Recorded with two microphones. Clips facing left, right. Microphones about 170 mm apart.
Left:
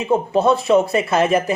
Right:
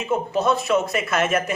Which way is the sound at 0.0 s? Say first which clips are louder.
Left 5 dB; 30° left (ahead or behind).